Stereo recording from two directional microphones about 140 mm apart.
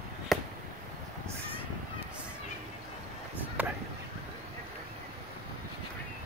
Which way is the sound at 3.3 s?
10° right (ahead or behind).